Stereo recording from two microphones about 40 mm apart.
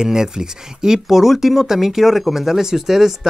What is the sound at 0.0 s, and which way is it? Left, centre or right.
Speech, centre.